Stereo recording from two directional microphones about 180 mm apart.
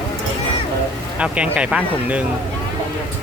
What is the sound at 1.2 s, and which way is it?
Speech, 5° right (ahead or behind).